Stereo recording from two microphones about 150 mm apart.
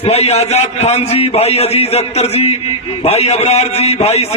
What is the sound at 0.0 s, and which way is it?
A man's voice, 45° left (ahead or behind).